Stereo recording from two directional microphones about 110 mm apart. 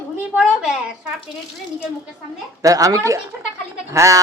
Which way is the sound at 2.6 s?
30° right (ahead or behind).